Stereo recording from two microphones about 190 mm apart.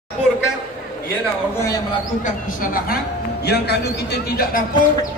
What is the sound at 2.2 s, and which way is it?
Speech, 45° left (ahead or behind).